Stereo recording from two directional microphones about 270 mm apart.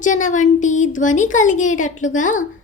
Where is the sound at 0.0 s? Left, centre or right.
Left.